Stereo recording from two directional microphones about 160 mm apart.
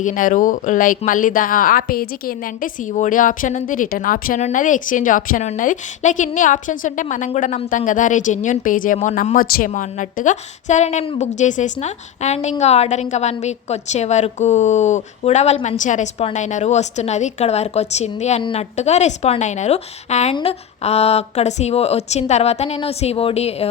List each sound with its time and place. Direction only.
0.0 s a woman's voice: 55° left (ahead or behind); by 11.3 s 40° left (ahead or behind)
11.3 s a woman's voice: 50° left (ahead or behind)